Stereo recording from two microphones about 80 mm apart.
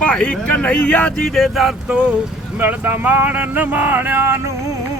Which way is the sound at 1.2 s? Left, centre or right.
Centre.